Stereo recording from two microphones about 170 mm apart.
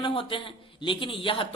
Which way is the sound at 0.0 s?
30° left (ahead or behind).